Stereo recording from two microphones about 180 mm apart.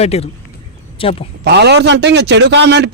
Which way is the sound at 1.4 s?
70° right (ahead or behind).